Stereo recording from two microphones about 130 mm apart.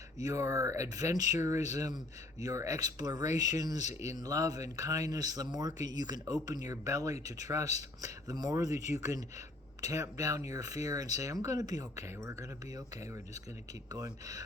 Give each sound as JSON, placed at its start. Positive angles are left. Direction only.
{"t": 0.2, "sound": "speech", "side_deg": -25}